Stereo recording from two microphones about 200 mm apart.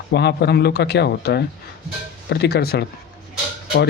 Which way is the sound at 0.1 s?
55° left (ahead or behind).